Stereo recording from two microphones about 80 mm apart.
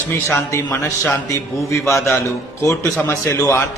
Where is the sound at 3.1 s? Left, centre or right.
Left.